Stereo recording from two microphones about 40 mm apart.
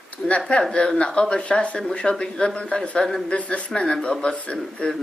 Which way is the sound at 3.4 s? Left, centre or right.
Left.